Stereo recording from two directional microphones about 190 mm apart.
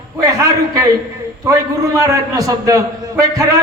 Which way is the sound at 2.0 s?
20° right (ahead or behind).